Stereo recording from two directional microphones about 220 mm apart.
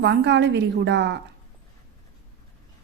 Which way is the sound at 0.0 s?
55° right (ahead or behind).